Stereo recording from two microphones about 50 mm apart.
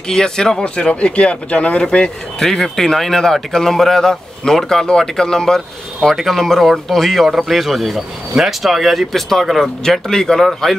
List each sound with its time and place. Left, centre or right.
0.1 s speech: centre
2.4 s a man's voice: centre